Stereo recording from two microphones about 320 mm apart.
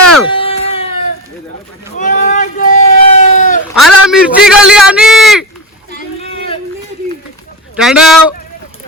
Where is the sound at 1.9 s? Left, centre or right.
Left.